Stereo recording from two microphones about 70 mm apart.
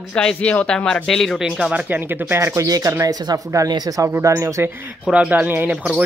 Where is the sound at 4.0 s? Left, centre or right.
Right.